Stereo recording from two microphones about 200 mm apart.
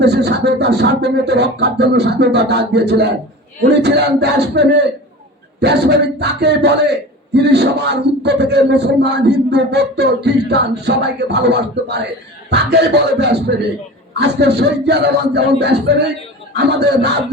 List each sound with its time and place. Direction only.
0.0 s a man's voice: 60° right (ahead or behind)